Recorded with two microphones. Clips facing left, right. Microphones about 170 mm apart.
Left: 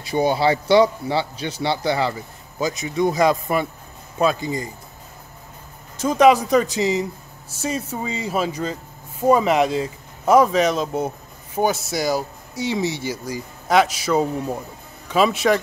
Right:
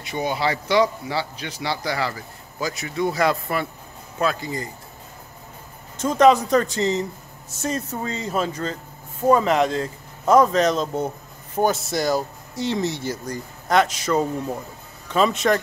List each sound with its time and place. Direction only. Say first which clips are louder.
0.0 s speech: left 5 dB; 35° left (ahead or behind)
6.0 s a man's voice: left 1 dB; 10° left (ahead or behind)